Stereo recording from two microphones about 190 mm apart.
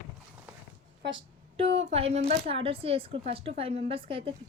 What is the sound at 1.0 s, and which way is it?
Speech, 85° right.